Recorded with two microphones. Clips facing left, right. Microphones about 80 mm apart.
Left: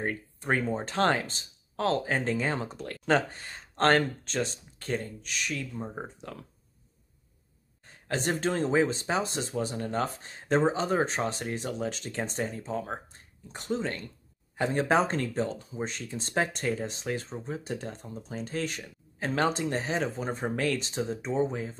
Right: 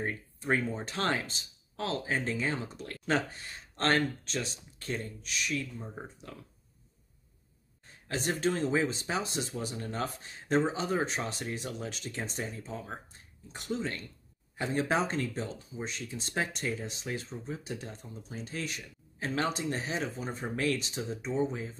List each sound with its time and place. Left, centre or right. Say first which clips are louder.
0.0 s speech: left 3 dB; left
8.1 s speech: left 2 dB; left